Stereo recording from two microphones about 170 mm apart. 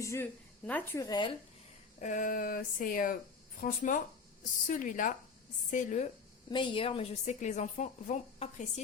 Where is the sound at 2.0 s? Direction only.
45° left (ahead or behind).